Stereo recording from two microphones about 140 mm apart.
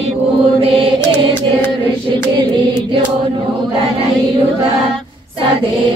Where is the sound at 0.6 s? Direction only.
40° right (ahead or behind).